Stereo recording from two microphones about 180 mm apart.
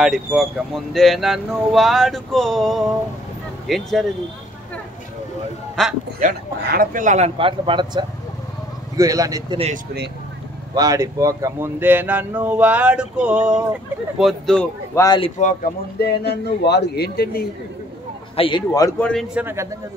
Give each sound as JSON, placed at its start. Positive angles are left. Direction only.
{"t": 0.0, "sound": "speech", "side_deg": 0}
{"t": 5.8, "sound": "speech", "side_deg": 5}
{"t": 6.6, "sound": "speech", "side_deg": -55}
{"t": 10.7, "sound": "speech", "side_deg": -20}
{"t": 15.0, "sound": "speech", "side_deg": 25}
{"t": 16.0, "sound": "speech", "side_deg": 65}
{"t": 18.3, "sound": "a man's voice", "side_deg": 30}
{"t": 18.7, "sound": "speech", "side_deg": 15}
{"t": 19.3, "sound": "speech", "side_deg": -15}